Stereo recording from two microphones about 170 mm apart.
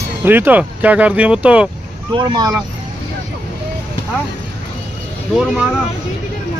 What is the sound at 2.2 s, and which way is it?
Speech, 25° right (ahead or behind).